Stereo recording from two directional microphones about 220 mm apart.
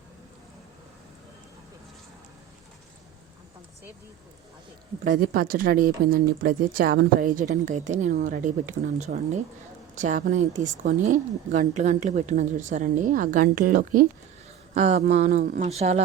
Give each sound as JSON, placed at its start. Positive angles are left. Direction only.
{"t": 5.0, "sound": "speech", "side_deg": -40}